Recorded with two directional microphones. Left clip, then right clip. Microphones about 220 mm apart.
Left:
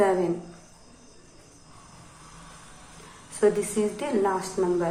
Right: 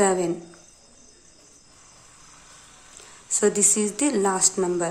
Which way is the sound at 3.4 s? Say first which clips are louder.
Right 1 dB; 40° right (ahead or behind).